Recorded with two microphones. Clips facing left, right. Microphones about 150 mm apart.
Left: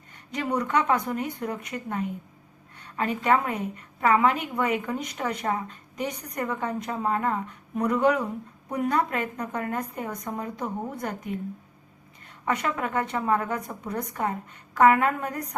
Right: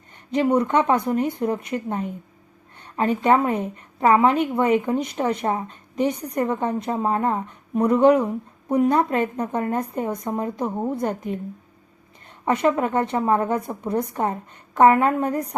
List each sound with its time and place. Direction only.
0.3 s a woman's voice: 25° right (ahead or behind)
12.5 s a woman's voice: 25° right (ahead or behind)